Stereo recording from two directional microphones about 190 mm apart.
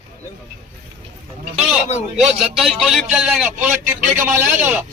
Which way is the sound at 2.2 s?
5° right (ahead or behind).